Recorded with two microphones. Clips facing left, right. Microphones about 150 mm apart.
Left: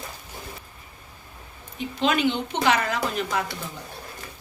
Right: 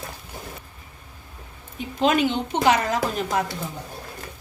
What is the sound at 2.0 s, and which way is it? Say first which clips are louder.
A woman's voice: right 2 dB; 45° right (ahead or behind).